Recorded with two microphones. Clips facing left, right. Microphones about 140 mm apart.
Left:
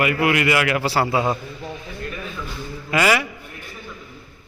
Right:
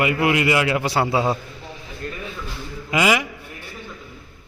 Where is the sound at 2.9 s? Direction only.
15° right (ahead or behind).